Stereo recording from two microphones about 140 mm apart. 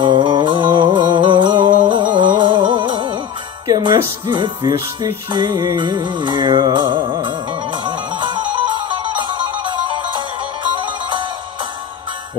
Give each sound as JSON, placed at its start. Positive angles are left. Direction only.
{"t": 0.0, "sound": "music", "side_deg": -35}